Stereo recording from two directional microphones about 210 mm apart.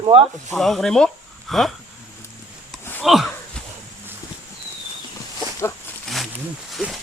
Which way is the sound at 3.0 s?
Centre (ahead or behind).